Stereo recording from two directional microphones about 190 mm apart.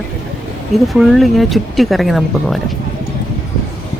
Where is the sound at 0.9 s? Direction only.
Centre (ahead or behind).